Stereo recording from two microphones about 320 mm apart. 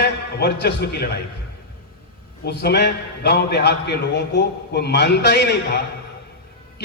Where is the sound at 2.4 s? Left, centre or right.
Left.